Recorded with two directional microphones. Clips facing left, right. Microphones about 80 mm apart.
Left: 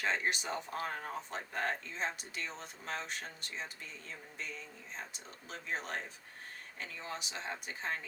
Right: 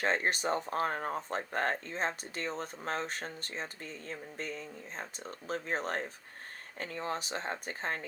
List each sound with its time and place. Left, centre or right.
0.0 s speech: right